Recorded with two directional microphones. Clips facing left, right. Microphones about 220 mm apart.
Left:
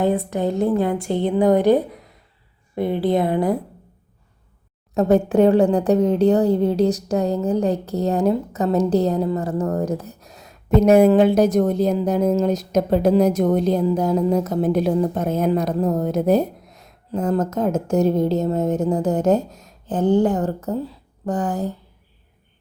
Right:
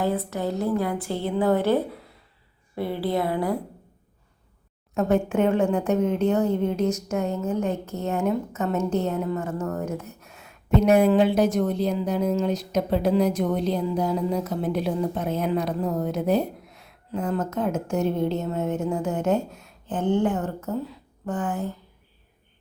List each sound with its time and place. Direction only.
0.3 s a woman's voice: 20° left (ahead or behind)
4.9 s a woman's voice: 35° left (ahead or behind)